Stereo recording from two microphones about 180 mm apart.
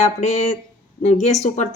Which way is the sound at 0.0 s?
40° left (ahead or behind).